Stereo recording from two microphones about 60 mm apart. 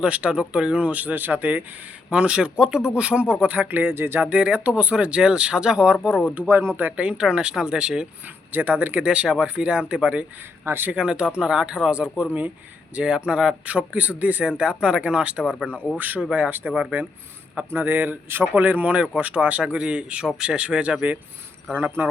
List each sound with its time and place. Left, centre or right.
0.0 s speech: centre; by 4.2 s right
4.2 s speech: right
6.5 s speech: right
6.8 s speech: right
8.5 s speech: right
10.7 s speech: right
10.9 s speech: centre
13.0 s speech: centre
13.7 s speech: right
15.6 s speech: left
16.0 s speech: right